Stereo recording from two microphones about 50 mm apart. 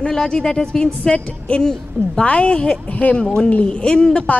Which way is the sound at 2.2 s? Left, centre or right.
Left.